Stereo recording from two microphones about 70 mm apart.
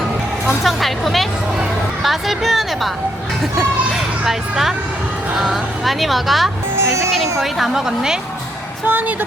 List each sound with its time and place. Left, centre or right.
0.4 s speech: centre
3.8 s vehicle: centre
5.4 s a woman's voice: centre
8.9 s speech: right